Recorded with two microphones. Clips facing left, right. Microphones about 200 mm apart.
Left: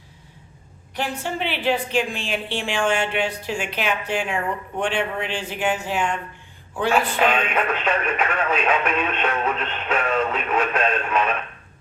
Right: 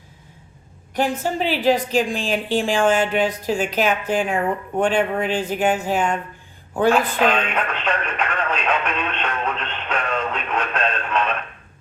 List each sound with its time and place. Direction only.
1.2 s a woman's voice: 40° right (ahead or behind)
7.2 s speech: 10° left (ahead or behind)